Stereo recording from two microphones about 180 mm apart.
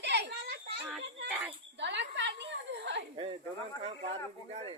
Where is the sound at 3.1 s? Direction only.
30° right (ahead or behind).